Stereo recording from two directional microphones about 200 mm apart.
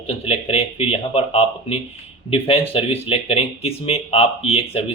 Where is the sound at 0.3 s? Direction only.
30° left (ahead or behind).